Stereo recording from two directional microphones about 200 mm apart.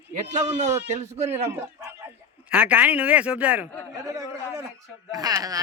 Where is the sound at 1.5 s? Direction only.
10° right (ahead or behind).